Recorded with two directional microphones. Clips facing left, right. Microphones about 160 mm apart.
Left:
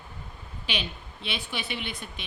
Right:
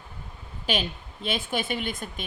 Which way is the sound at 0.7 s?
45° right (ahead or behind).